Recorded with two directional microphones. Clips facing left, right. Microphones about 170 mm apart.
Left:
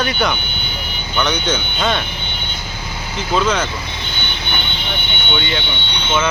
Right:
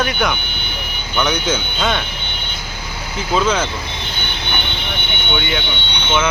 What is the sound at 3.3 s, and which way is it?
Speech, 5° right (ahead or behind).